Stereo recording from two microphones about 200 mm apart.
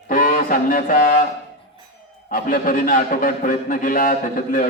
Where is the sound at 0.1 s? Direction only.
40° left (ahead or behind).